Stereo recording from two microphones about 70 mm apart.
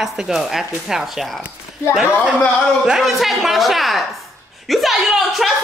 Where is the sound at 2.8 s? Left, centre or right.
Centre.